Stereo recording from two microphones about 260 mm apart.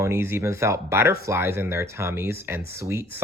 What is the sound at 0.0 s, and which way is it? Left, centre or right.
Speech, centre.